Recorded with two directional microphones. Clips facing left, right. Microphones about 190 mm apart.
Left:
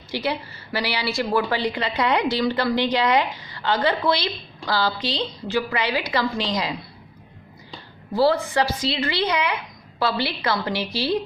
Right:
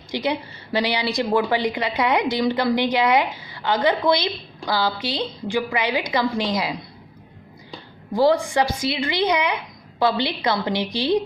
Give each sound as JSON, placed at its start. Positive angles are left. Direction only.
{"t": 0.1, "sound": "a woman's voice", "side_deg": -15}
{"t": 8.1, "sound": "speech", "side_deg": -15}